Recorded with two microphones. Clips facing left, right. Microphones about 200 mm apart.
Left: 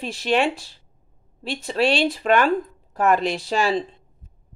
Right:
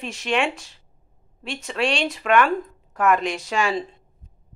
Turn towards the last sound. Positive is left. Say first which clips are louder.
# left 2 dB
turn(degrees=35)  # may be behind; listen again after turning